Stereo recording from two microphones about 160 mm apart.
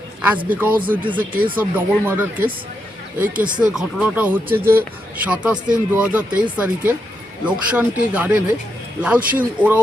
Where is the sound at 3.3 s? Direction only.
55° right (ahead or behind).